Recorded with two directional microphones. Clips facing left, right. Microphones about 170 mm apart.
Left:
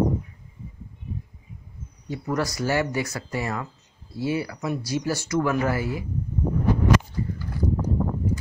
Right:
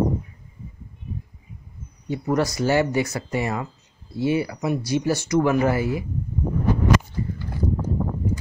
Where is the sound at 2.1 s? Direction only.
25° right (ahead or behind).